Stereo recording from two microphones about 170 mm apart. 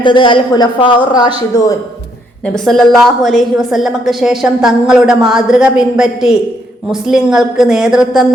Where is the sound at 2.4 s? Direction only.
5° left (ahead or behind).